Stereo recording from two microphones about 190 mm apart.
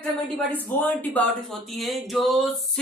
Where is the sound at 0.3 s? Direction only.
10° left (ahead or behind).